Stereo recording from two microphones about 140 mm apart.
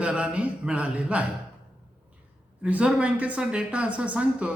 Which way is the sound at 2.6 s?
10° right (ahead or behind).